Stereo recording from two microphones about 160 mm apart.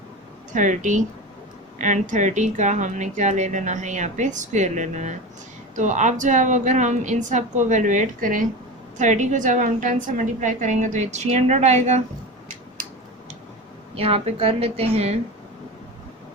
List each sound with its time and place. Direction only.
0.5 s speech: 50° right (ahead or behind)
13.9 s a woman's voice: 40° right (ahead or behind)